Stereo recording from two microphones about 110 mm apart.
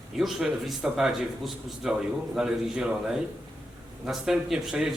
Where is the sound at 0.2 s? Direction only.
5° right (ahead or behind).